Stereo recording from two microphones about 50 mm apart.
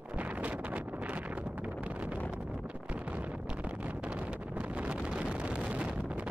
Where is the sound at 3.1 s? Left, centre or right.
Right.